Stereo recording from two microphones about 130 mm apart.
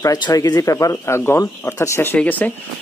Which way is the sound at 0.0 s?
30° left (ahead or behind).